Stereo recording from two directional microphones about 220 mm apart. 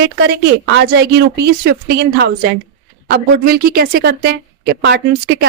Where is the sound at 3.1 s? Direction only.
45° right (ahead or behind).